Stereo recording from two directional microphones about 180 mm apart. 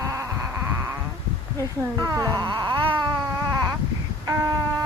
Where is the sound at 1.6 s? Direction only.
20° right (ahead or behind).